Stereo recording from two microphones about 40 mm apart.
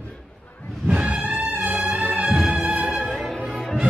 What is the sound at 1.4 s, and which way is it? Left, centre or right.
Music, right.